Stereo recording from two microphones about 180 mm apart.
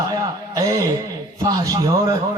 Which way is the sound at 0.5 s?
20° right (ahead or behind).